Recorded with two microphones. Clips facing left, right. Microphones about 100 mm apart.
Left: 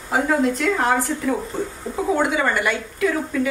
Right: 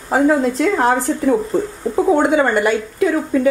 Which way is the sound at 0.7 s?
35° right (ahead or behind).